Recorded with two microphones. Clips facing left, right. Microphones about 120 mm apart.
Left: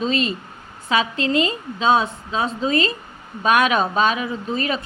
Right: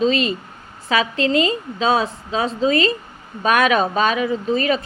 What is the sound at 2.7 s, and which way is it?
Speech, 35° left (ahead or behind).